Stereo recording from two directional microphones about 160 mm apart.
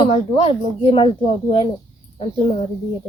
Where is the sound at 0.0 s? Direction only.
35° left (ahead or behind).